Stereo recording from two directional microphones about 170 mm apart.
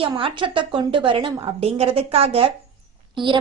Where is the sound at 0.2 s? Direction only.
30° right (ahead or behind).